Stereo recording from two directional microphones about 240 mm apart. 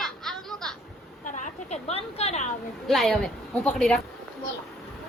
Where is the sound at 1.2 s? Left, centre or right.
Left.